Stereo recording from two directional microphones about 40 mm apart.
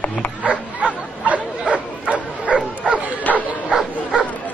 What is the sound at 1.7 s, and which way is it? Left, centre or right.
Bow-wow, right.